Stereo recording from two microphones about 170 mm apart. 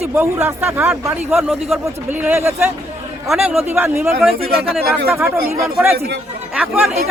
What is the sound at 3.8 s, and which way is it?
Speech, 15° right (ahead or behind).